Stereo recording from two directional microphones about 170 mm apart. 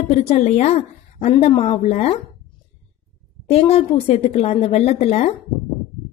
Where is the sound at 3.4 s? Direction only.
35° left (ahead or behind).